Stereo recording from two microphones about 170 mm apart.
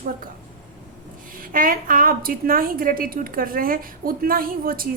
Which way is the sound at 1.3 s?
55° right (ahead or behind).